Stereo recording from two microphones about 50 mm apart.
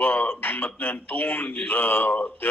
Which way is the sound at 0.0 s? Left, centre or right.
Left.